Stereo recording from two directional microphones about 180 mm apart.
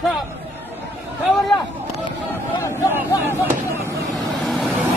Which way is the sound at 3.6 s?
15° right (ahead or behind).